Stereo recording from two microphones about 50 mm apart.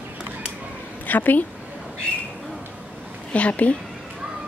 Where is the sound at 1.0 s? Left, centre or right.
Left.